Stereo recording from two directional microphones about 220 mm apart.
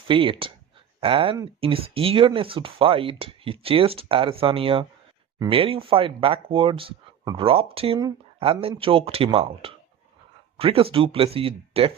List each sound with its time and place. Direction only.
0.1 s speech: 25° right (ahead or behind)